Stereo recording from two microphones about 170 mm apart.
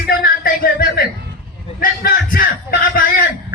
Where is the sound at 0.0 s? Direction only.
60° left (ahead or behind).